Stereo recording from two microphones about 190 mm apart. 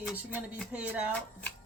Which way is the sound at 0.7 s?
5° right (ahead or behind).